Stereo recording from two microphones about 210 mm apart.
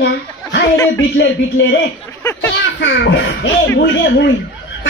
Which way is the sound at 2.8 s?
55° left (ahead or behind).